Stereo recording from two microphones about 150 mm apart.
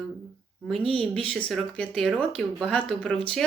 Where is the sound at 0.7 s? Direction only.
40° right (ahead or behind).